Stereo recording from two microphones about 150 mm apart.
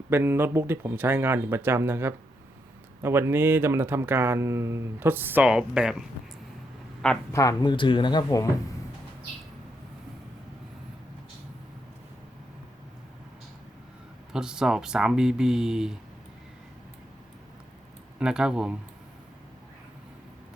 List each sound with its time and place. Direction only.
0.1 s speech: 15° right (ahead or behind)
7.3 s speech: 25° left (ahead or behind)
14.3 s speech: 5° right (ahead or behind)
18.2 s speech: 5° right (ahead or behind)